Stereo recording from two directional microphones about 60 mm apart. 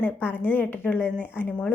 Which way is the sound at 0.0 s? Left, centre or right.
Left.